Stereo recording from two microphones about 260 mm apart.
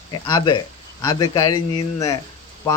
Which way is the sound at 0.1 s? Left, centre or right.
Centre.